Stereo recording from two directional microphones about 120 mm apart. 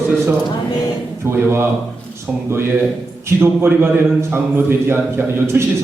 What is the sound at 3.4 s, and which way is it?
A man's voice, 20° right (ahead or behind).